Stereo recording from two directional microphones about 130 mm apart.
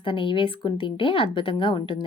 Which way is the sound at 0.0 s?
40° left (ahead or behind).